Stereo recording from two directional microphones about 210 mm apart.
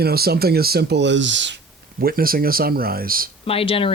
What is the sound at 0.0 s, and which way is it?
Speech, 45° right (ahead or behind).